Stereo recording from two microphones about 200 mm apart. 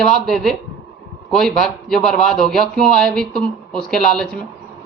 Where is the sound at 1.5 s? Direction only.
Centre (ahead or behind).